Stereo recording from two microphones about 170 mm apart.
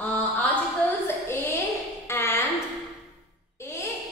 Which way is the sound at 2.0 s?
15° left (ahead or behind).